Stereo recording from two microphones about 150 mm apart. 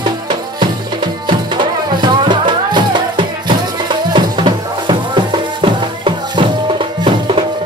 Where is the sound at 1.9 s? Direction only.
30° right (ahead or behind).